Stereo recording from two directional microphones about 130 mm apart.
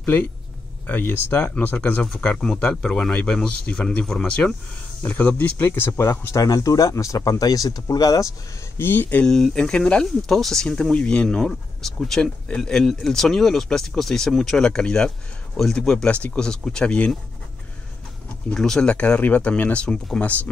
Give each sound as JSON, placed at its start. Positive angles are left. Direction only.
{"t": 0.8, "sound": "speech", "side_deg": 15}
{"t": 8.7, "sound": "speech", "side_deg": 15}
{"t": 18.5, "sound": "speech", "side_deg": 5}